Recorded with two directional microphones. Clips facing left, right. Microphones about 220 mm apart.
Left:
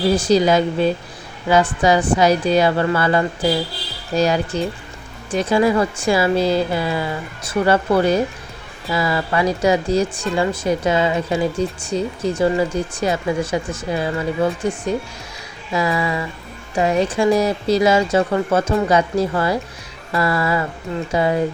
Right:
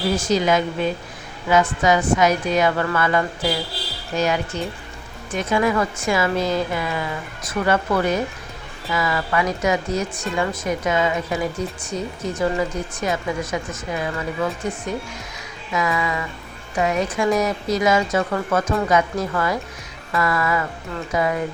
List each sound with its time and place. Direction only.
0.2 s speech: 35° left (ahead or behind)
15.7 s speech: 30° left (ahead or behind)